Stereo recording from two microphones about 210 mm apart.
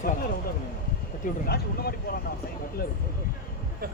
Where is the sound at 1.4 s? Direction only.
50° left (ahead or behind).